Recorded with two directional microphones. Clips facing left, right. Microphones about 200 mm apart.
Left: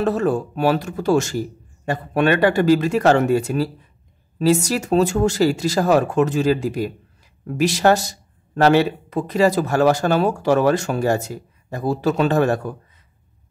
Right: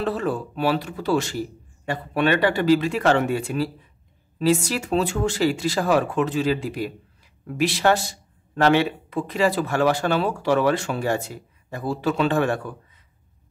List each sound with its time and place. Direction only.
0.0 s speech: 45° left (ahead or behind)